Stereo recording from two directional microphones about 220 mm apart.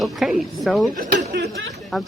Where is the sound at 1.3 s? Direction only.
55° right (ahead or behind).